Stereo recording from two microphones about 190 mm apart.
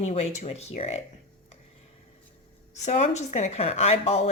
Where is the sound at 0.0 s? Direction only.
35° left (ahead or behind).